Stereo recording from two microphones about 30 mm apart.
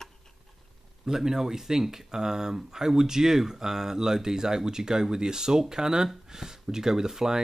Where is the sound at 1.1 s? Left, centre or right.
Centre.